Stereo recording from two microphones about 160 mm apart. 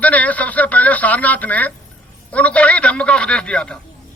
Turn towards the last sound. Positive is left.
turn(degrees=5)  # may be behind; listen again after turning